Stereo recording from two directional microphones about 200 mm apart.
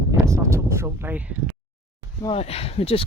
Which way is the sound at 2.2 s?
25° left (ahead or behind).